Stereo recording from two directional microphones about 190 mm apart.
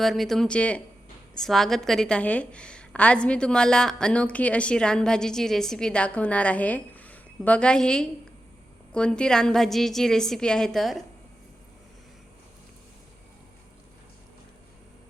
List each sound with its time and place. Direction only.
0.0 s a woman's voice: centre (ahead or behind)